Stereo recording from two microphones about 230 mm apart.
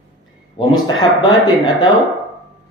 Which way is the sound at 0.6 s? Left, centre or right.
Left.